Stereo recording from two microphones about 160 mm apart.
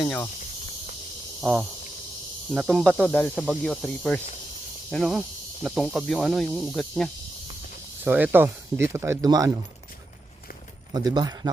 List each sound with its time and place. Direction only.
0.0 s speech: 5° left (ahead or behind)
1.4 s a sound: centre (ahead or behind)
2.5 s speech: 5° right (ahead or behind)
8.0 s speech: 10° right (ahead or behind)
10.9 s speech: 25° right (ahead or behind)